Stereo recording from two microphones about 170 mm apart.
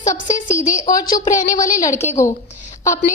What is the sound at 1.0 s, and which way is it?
Speech, 45° left (ahead or behind).